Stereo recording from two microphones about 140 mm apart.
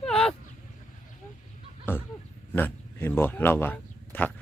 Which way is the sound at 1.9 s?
15° left (ahead or behind).